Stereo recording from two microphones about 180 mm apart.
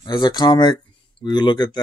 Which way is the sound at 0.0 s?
25° left (ahead or behind).